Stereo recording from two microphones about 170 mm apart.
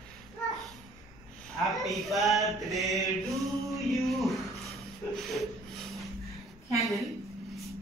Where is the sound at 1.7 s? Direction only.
Centre (ahead or behind).